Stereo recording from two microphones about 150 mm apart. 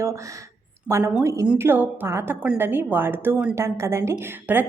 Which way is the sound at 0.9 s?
20° right (ahead or behind).